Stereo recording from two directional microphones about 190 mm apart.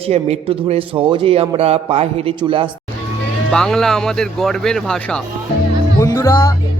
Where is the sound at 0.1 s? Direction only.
35° right (ahead or behind).